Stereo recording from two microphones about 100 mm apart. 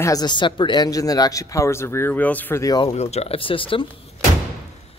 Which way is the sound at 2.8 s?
90° left.